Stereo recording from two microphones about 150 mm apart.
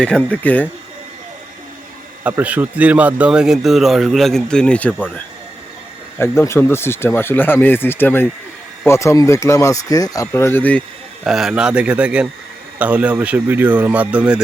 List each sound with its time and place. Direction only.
0.0 s speech: 5° left (ahead or behind)
2.2 s speech: 10° right (ahead or behind); by 10.8 s 10° left (ahead or behind)
11.2 s speech: centre (ahead or behind)